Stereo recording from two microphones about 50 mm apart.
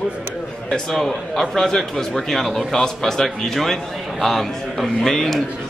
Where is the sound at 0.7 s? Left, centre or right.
Centre.